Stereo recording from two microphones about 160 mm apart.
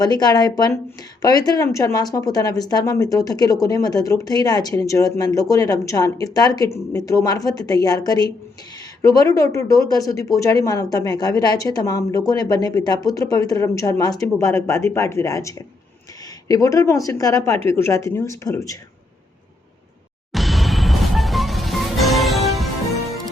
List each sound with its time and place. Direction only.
0.0 s speech: 25° left (ahead or behind)
20.3 s music: centre (ahead or behind)